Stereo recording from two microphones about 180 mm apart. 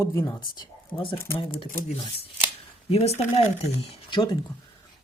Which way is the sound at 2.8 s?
35° left (ahead or behind).